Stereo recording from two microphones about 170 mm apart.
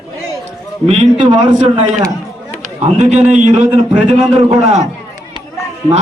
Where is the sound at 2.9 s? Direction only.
40° right (ahead or behind).